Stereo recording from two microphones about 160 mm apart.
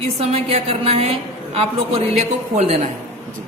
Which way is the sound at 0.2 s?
40° right (ahead or behind).